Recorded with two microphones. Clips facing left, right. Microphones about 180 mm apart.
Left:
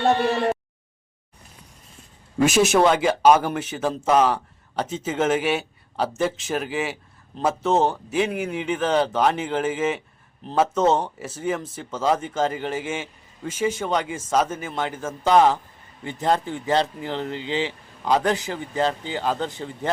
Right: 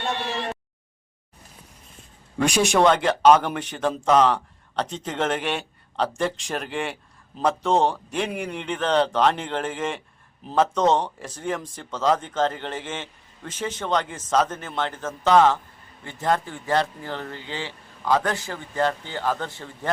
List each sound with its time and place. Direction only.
2.4 s a man's voice: 5° left (ahead or behind)